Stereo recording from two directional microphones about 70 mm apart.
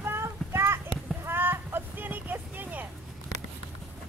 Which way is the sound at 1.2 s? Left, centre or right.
Right.